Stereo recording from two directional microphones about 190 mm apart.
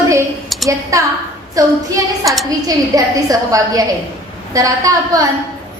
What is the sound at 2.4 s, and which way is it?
A woman's voice, 20° right (ahead or behind).